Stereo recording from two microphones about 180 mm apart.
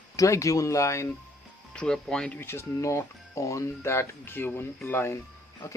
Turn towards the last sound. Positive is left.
turn(degrees=15)  # may be behind; listen again after turning